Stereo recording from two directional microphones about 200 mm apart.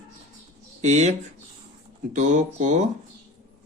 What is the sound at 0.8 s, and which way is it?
Speech, 35° right (ahead or behind).